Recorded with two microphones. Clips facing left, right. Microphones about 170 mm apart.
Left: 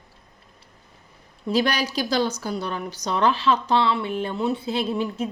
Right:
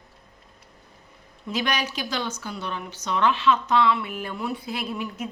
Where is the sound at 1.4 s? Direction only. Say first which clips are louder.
Left 5 dB; 35° left (ahead or behind).